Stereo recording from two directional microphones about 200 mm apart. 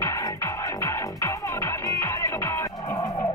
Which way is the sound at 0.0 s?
15° left (ahead or behind).